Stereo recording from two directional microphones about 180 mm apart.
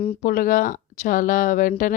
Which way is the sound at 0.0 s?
45° left (ahead or behind).